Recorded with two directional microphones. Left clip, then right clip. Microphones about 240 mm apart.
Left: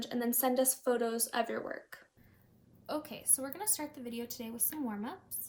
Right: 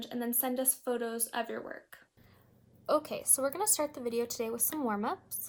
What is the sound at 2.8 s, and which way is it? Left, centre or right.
A woman's voice, right.